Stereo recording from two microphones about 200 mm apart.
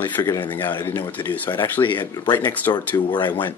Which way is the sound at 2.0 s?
20° left (ahead or behind).